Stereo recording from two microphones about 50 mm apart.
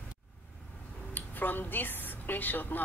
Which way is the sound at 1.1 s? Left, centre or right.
Left.